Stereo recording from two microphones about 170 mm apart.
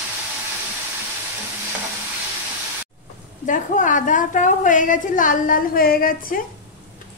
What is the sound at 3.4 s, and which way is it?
A woman's voice, 50° left (ahead or behind).